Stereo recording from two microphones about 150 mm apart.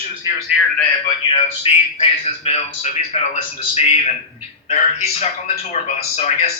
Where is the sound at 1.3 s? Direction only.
40° left (ahead or behind).